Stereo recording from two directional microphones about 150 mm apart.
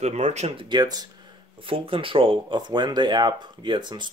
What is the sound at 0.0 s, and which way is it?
Speech, 50° right (ahead or behind).